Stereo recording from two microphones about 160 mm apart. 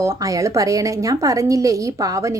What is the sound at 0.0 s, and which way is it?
A woman's voice, 20° right (ahead or behind).